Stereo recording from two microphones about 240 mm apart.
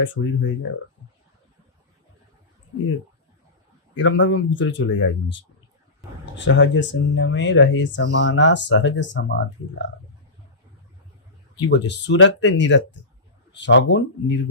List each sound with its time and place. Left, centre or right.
0.0 s speech: left
3.9 s speech: left
11.5 s speech: left